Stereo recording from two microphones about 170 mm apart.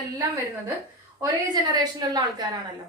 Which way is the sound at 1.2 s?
25° right (ahead or behind).